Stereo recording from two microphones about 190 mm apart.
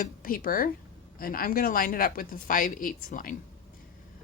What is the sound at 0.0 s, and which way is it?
A woman's voice, 50° left (ahead or behind).